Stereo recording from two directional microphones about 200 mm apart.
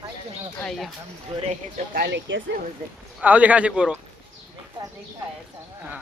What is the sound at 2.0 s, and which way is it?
Speech, 60° right (ahead or behind).